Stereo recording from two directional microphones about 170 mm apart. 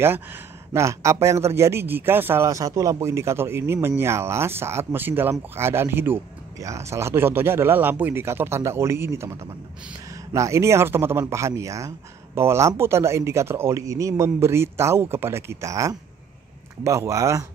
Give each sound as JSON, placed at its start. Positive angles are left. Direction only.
{"t": 0.0, "sound": "speech", "side_deg": -15}
{"t": 10.3, "sound": "speech", "side_deg": -20}